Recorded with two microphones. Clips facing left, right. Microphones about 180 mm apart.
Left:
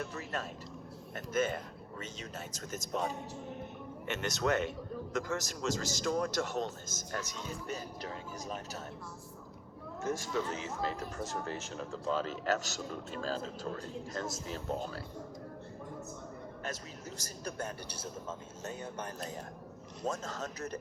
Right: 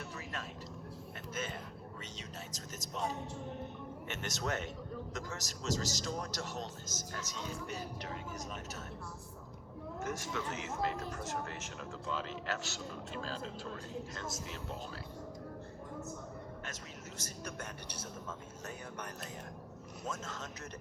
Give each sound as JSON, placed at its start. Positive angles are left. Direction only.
{"t": 0.2, "sound": "a sound", "side_deg": 40}
{"t": 2.7, "sound": "speech", "side_deg": 50}
{"t": 4.0, "sound": "a man's voice", "side_deg": 60}
{"t": 7.7, "sound": "speech", "side_deg": 40}
{"t": 10.1, "sound": "speech", "side_deg": 30}
{"t": 17.2, "sound": "speech", "side_deg": 35}